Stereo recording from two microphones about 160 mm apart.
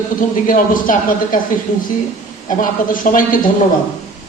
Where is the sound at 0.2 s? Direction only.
55° left (ahead or behind).